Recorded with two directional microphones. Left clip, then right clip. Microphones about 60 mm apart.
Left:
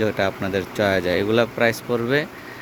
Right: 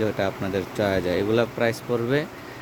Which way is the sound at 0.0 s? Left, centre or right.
Centre.